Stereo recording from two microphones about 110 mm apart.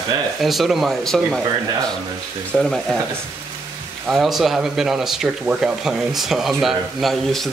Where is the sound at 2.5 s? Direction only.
Centre (ahead or behind).